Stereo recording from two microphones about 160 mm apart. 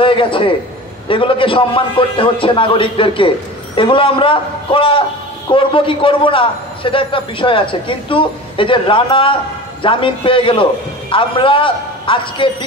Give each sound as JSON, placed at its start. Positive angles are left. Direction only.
{"t": 0.0, "sound": "a man's voice", "side_deg": 35}